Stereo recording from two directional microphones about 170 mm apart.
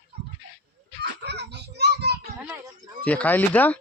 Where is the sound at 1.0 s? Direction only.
80° right.